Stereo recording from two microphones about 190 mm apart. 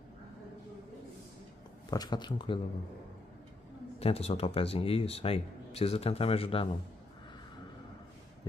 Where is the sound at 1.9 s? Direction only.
20° left (ahead or behind).